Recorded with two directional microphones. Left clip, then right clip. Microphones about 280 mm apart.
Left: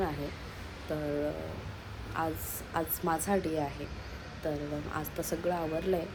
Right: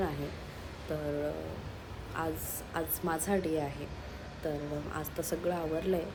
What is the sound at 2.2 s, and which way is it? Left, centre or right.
A woman's voice, centre.